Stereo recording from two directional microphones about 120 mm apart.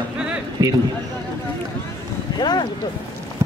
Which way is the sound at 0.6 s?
30° right (ahead or behind).